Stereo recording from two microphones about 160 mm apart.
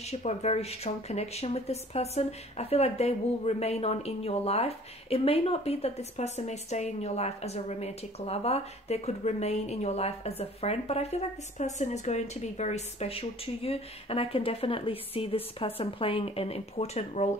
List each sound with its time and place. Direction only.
0.0 s speech: 40° left (ahead or behind)